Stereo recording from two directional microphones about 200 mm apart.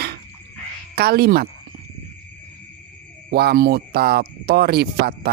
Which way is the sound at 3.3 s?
50° right (ahead or behind).